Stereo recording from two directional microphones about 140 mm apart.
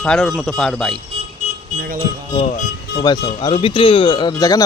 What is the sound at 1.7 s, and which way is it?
Speech, 90° right.